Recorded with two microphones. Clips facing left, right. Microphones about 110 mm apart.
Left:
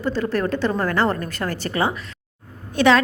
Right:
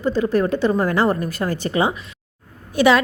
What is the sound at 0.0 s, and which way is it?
A woman's voice, 15° right (ahead or behind).